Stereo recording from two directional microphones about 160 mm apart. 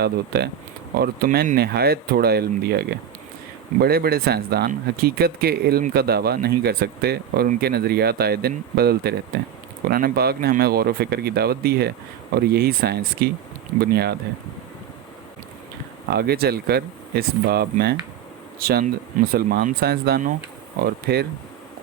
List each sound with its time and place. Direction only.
0.0 s speech: 85° right
0.9 s speech: 75° right (ahead or behind)
16.0 s speech: 80° right